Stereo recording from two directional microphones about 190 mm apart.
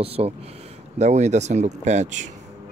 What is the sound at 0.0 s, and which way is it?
Speech, 30° right (ahead or behind).